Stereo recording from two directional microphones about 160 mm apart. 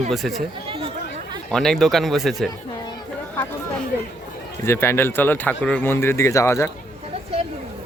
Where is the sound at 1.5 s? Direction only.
5° left (ahead or behind).